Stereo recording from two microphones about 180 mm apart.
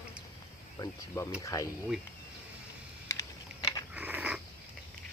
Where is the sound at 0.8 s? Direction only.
15° left (ahead or behind).